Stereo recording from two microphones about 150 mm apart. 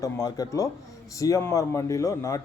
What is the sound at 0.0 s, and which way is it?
A man's voice, 25° left (ahead or behind).